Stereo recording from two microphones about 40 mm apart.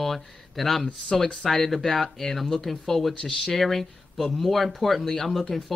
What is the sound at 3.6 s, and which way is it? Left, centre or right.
Speech, centre.